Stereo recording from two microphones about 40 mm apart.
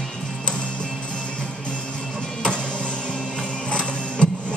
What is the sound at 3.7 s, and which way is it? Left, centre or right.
Printer, left.